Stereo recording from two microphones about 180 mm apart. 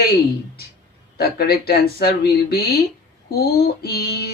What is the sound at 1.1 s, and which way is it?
Speech, 60° left (ahead or behind).